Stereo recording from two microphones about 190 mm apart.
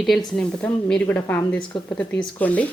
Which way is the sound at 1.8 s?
5° left (ahead or behind).